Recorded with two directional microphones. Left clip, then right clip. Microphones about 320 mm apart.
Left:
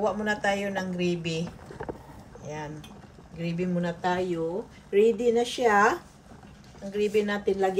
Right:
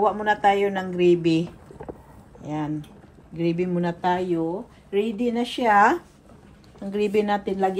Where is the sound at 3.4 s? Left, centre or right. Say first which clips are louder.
Right 6 dB; centre.